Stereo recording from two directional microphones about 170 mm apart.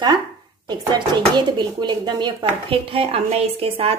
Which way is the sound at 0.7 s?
25° right (ahead or behind).